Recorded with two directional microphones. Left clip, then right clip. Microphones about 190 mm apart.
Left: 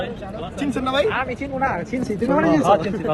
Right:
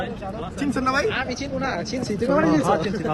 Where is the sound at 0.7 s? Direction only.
Centre (ahead or behind).